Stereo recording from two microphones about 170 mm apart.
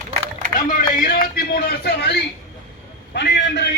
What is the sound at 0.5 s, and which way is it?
A man's voice, 55° left (ahead or behind).